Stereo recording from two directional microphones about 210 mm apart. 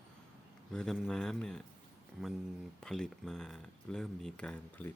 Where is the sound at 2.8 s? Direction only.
Centre (ahead or behind).